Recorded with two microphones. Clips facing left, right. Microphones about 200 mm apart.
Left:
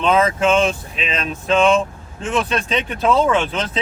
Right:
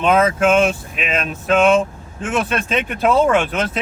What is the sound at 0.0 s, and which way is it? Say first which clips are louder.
Speech: right 1 dB; 5° right (ahead or behind).